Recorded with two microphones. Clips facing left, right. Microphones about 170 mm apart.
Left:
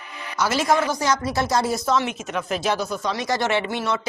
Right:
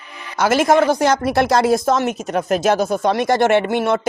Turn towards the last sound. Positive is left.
turn(degrees=-55)  # may be behind; listen again after turning